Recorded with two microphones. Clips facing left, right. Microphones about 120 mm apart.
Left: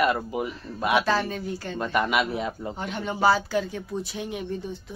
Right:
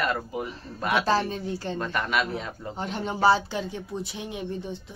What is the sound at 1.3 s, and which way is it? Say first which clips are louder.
Speech: right 1 dB; 30° right (ahead or behind).